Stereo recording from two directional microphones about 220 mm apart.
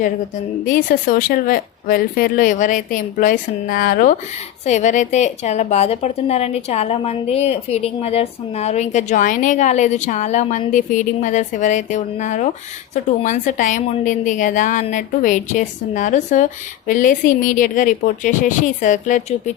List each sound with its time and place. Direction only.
0.6 s a woman's voice: 40° left (ahead or behind)